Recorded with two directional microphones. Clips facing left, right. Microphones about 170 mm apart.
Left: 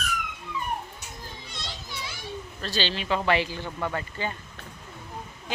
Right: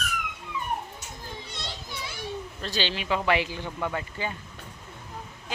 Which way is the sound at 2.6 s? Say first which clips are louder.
Left 1 dB; 15° right (ahead or behind).